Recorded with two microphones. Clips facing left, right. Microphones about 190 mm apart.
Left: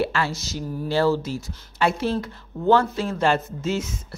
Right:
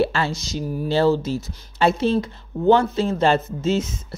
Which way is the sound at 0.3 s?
20° right (ahead or behind).